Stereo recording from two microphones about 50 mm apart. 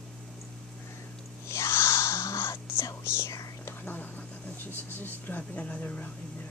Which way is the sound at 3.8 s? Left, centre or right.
Left.